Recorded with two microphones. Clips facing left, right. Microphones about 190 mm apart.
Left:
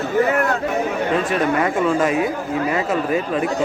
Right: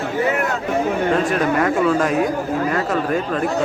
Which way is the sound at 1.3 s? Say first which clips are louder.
Right 1 dB; centre (ahead or behind).